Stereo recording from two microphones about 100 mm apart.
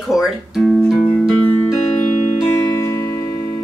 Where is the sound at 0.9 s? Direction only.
Centre (ahead or behind).